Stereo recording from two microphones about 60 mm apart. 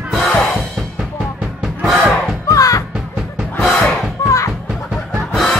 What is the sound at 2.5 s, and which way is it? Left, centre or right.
Music, left.